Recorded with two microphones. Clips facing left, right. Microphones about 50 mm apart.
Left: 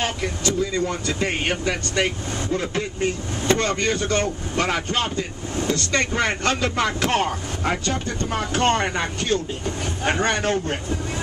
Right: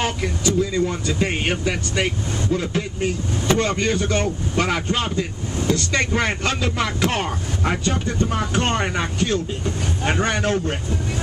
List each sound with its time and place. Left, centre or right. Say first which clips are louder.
0.0 s speech: right 2 dB; centre
7.8 s speech: right 3 dB; centre